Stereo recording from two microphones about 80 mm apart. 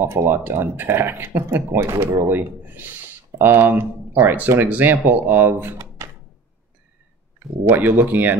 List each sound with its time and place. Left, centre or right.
0.0 s speech: right
6.0 s door: right
7.6 s speech: right